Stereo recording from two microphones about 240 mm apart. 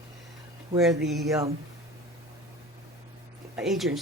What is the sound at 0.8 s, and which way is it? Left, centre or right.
Speech, centre.